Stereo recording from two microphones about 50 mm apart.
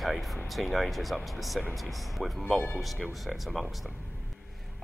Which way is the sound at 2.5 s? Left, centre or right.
Left.